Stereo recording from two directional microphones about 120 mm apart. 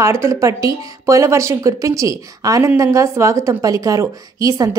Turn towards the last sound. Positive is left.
turn(degrees=-30)  # may be behind; listen again after turning